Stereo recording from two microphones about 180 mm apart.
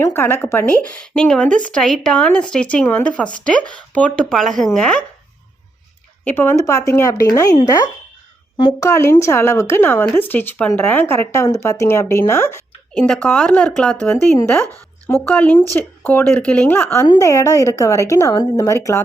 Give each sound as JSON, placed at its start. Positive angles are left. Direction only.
{"t": 0.1, "sound": "speech", "side_deg": 10}
{"t": 6.2, "sound": "speech", "side_deg": 10}